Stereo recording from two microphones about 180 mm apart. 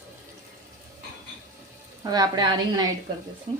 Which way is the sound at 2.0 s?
20° right (ahead or behind).